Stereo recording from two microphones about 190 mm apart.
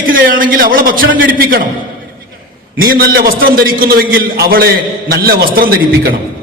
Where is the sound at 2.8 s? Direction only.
50° right (ahead or behind).